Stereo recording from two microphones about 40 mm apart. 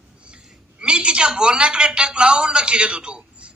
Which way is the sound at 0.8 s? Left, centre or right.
Right.